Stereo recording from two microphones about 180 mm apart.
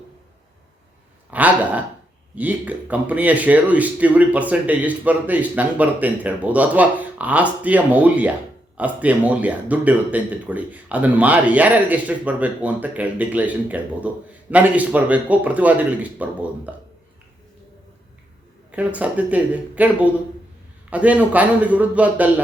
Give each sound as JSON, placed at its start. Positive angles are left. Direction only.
{"t": 1.3, "sound": "a sound", "side_deg": -10}
{"t": 2.3, "sound": "speech", "side_deg": -10}
{"t": 18.7, "sound": "speech", "side_deg": -5}